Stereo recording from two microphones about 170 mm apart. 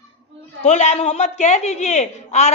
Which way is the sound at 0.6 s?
40° left (ahead or behind).